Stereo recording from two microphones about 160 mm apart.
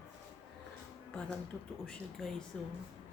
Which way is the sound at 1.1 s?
5° left (ahead or behind).